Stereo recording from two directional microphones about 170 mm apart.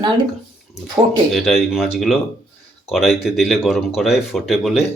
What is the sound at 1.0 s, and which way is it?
Speech, 5° right (ahead or behind).